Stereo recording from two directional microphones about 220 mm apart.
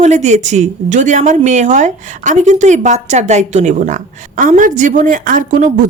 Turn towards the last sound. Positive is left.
turn(degrees=-35)  # may be behind; listen again after turning